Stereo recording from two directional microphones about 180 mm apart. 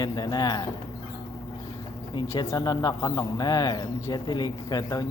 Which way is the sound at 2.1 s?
25° left (ahead or behind).